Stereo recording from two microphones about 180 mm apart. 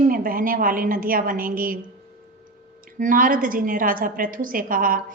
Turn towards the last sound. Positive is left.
turn(degrees=-50)  # may be behind; listen again after turning